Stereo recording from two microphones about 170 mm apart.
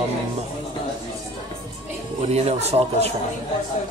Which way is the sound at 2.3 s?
40° right (ahead or behind).